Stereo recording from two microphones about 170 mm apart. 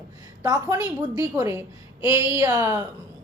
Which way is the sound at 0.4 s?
20° right (ahead or behind).